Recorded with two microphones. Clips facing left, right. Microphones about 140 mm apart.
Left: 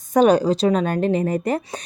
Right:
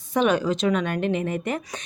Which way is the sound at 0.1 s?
40° left (ahead or behind).